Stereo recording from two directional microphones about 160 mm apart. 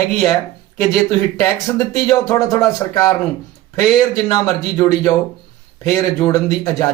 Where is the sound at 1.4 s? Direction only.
20° left (ahead or behind).